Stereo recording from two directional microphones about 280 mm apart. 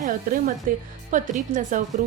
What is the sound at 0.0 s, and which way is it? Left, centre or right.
Speech, right.